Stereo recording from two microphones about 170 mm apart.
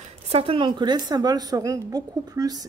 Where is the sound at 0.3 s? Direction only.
35° right (ahead or behind).